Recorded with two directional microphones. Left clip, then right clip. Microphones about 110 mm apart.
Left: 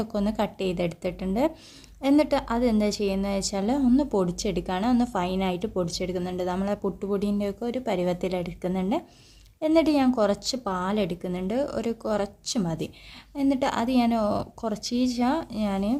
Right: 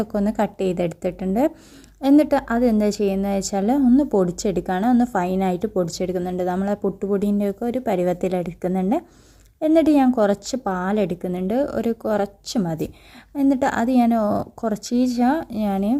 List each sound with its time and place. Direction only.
0.0 s a woman's voice: 40° right (ahead or behind)